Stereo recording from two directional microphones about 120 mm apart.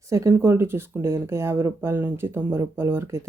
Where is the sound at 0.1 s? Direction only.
25° right (ahead or behind).